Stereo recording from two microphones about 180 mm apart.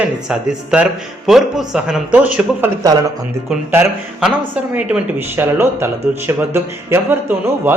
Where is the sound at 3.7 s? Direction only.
10° right (ahead or behind).